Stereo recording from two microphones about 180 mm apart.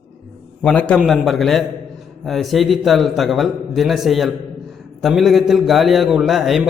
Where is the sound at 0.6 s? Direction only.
5° left (ahead or behind).